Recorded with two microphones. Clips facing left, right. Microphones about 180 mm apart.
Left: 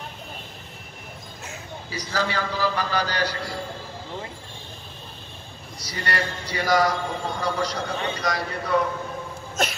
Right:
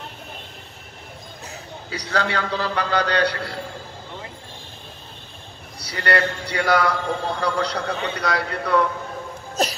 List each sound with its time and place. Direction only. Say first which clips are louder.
1.9 s a man's voice: right 3 dB; 65° right (ahead or behind)
5.8 s a man's voice: right 7 dB; 65° right (ahead or behind)
9.6 s a sound: right 3 dB; 35° right (ahead or behind)